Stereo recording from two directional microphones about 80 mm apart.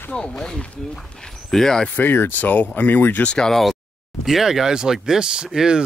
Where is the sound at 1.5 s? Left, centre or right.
Centre.